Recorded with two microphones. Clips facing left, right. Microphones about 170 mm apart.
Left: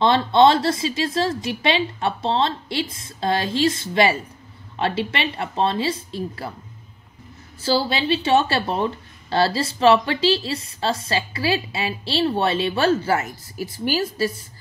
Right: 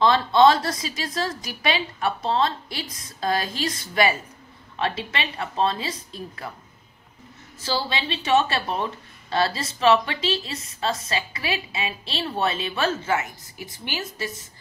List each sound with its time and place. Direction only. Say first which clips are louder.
0.0 s a woman's voice: left 2 dB; 25° left (ahead or behind)
7.6 s a woman's voice: left 6 dB; 30° left (ahead or behind)